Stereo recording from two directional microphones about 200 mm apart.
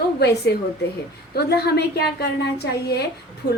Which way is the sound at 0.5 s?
55° left (ahead or behind).